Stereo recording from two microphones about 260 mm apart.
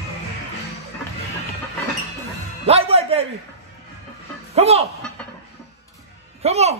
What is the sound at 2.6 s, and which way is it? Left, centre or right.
Music, right.